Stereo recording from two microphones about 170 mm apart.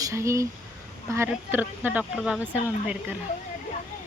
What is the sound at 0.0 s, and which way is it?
Speech, 15° right (ahead or behind).